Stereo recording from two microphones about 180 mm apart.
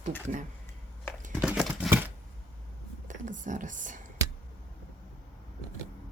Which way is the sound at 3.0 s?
45° right (ahead or behind).